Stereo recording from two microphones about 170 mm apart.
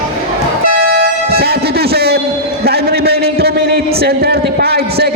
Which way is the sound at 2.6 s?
70° right (ahead or behind).